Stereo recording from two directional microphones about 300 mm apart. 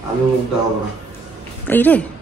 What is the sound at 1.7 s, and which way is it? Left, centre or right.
Speech, centre.